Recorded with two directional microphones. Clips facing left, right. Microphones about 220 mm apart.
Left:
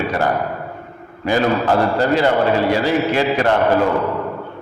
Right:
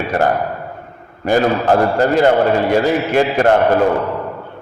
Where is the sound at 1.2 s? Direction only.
50° right (ahead or behind).